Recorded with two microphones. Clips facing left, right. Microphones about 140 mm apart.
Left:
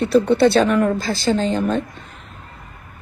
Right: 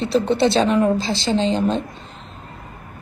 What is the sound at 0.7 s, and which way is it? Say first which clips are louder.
Speech: even; 25° right (ahead or behind).